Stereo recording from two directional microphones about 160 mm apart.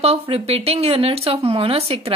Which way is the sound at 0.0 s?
40° right (ahead or behind).